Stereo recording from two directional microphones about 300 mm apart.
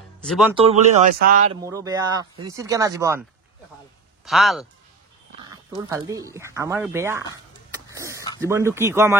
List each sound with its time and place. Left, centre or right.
0.2 s speech: centre
0.6 s speech: right
1.6 s speech: centre
4.3 s speech: centre
5.8 s speech: centre
7.7 s a sound: centre
8.4 s speech: centre